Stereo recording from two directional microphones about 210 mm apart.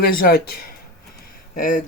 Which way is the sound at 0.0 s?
45° left (ahead or behind).